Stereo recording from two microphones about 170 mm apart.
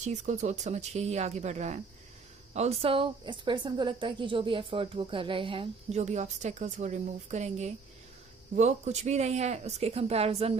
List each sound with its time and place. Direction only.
0.0 s speech: 45° right (ahead or behind)